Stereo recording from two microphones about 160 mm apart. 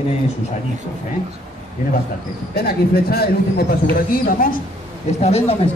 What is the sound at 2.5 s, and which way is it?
Speech, 75° left (ahead or behind).